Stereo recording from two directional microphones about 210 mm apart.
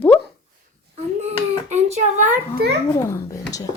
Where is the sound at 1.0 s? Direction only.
30° right (ahead or behind).